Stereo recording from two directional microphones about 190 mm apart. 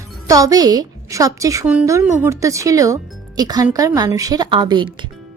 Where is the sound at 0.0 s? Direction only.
20° right (ahead or behind).